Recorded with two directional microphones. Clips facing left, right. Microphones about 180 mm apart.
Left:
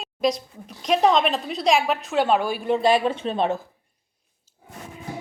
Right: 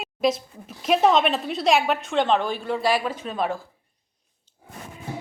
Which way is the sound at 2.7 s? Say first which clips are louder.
Left 5 dB; 25° left (ahead or behind).